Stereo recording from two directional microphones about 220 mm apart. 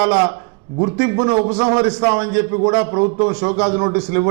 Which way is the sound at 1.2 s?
25° right (ahead or behind).